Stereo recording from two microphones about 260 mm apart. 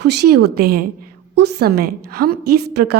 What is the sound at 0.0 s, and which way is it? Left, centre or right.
A woman's voice, right.